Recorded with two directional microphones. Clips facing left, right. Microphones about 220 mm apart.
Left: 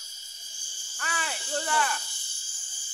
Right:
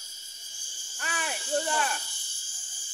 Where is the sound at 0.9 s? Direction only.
20° right (ahead or behind).